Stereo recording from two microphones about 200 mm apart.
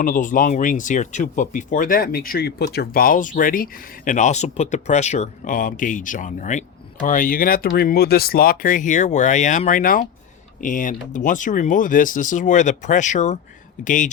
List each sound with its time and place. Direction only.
0.0 s speech: 40° left (ahead or behind)